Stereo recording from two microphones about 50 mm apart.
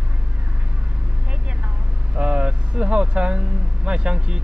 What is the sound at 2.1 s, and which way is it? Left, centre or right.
Vehicle, right.